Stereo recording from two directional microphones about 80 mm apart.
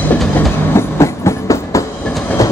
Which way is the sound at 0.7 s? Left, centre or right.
Left.